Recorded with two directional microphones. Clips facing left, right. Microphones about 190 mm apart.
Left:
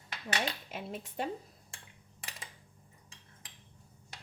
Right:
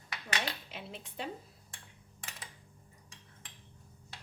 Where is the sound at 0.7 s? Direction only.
45° left (ahead or behind).